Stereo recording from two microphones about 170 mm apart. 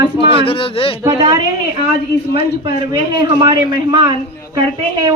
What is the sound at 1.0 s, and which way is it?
A man's voice, 25° right (ahead or behind).